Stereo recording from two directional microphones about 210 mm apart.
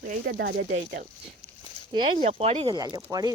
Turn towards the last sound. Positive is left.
turn(degrees=-15)  # may be behind; listen again after turning